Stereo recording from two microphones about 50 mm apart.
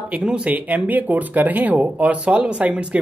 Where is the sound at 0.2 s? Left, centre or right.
Right.